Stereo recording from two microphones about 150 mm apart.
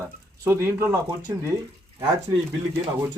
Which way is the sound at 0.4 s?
15° right (ahead or behind).